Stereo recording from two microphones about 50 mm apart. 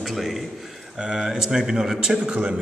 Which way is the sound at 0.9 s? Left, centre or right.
Centre.